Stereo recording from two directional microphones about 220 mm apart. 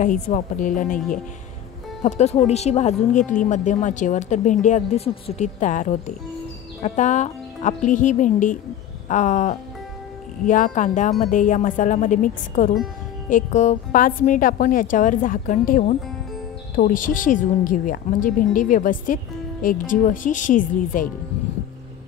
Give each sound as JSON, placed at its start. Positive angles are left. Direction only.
{"t": 0.0, "sound": "speech", "side_deg": 35}
{"t": 2.0, "sound": "speech", "side_deg": 30}